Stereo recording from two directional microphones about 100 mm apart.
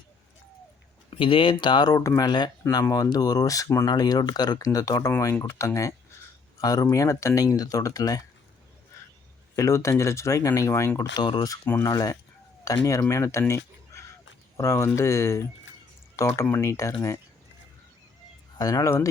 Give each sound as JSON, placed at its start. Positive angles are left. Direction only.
{"t": 1.1, "sound": "speech", "side_deg": 65}
{"t": 9.6, "sound": "speech", "side_deg": 30}
{"t": 11.1, "sound": "speech", "side_deg": 50}
{"t": 11.6, "sound": "speech", "side_deg": 20}
{"t": 11.9, "sound": "speech", "side_deg": 35}
{"t": 13.5, "sound": "a sound", "side_deg": 30}
{"t": 14.5, "sound": "speech", "side_deg": 30}
{"t": 18.5, "sound": "speech", "side_deg": 40}